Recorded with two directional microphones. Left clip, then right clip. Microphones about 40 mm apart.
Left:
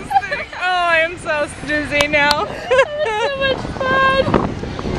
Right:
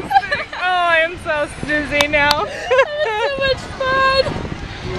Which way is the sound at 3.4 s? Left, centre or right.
Right.